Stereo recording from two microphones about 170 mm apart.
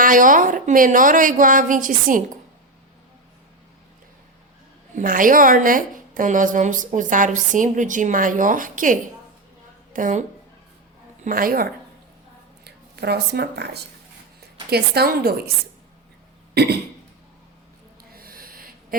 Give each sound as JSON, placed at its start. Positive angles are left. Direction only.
{"t": 0.0, "sound": "a woman's voice", "side_deg": -50}
{"t": 4.9, "sound": "a woman's voice", "side_deg": -55}
{"t": 12.6, "sound": "a woman's voice", "side_deg": -75}
{"t": 18.1, "sound": "a sound", "side_deg": -60}